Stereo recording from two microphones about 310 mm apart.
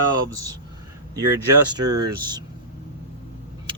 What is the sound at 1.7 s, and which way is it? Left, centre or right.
Speech, centre.